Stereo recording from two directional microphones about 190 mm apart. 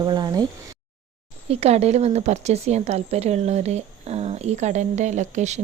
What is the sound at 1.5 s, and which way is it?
A woman's voice, 35° right (ahead or behind).